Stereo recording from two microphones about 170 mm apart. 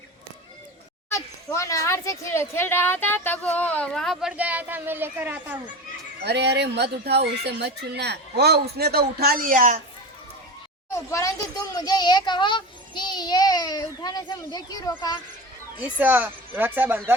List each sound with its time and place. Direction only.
1.1 s a child's voice: 20° left (ahead or behind); by 5.5 s 10° right (ahead or behind)
6.2 s speech: 80° right; by 9.8 s 50° right (ahead or behind)
10.9 s a sound: 15° left (ahead or behind)
11.7 s child singing: 25° left (ahead or behind)
15.8 s speech: 10° right (ahead or behind)